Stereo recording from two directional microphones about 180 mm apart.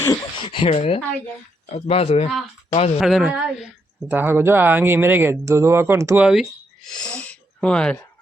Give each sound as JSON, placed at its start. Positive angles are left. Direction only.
{"t": 0.4, "sound": "speech", "side_deg": 30}
{"t": 3.0, "sound": "speech", "side_deg": 0}
{"t": 6.2, "sound": "speech", "side_deg": 0}